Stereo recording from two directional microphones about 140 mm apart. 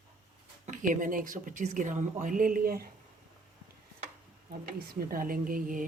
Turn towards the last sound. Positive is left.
turn(degrees=-75)  # may be behind; listen again after turning